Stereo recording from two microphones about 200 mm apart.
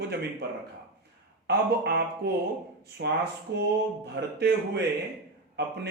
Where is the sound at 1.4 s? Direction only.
55° right (ahead or behind).